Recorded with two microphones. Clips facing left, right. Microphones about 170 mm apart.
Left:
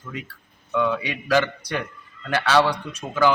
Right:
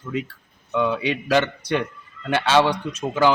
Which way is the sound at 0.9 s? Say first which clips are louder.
Right 1 dB; 25° right (ahead or behind).